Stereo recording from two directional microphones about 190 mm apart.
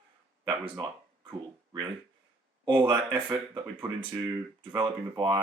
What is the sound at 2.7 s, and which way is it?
Speech, 25° right (ahead or behind).